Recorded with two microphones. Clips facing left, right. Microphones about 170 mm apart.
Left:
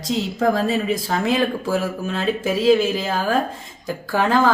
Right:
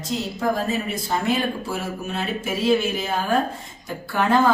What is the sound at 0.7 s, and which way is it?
Speech, 90° left.